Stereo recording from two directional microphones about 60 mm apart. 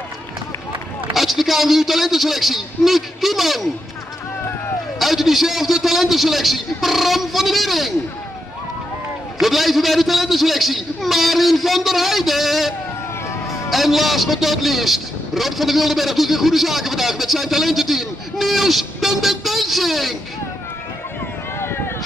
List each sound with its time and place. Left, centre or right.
1.1 s a man's voice: centre
4.9 s a man's voice: centre
9.4 s a man's voice: centre
21.5 s vehicle: left